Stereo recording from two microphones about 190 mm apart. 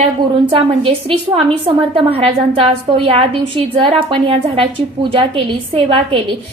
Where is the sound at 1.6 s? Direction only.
30° right (ahead or behind).